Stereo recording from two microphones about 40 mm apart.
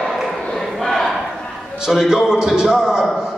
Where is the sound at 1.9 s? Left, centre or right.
Centre.